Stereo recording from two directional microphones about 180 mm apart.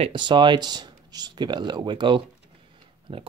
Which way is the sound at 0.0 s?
25° right (ahead or behind).